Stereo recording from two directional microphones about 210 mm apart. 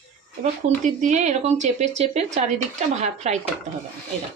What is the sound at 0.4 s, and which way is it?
Speech, 35° right (ahead or behind).